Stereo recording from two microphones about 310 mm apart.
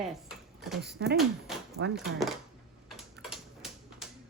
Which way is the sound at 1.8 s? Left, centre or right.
Right.